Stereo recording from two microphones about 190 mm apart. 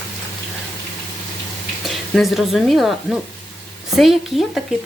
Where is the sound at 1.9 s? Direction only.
Centre (ahead or behind).